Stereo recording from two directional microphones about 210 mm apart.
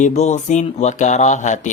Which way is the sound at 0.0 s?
35° left (ahead or behind).